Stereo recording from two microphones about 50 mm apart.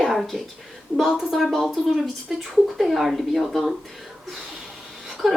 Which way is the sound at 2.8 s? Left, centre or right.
Centre.